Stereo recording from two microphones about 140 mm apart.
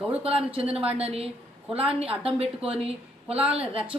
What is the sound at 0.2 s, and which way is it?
A woman's voice, 45° right (ahead or behind).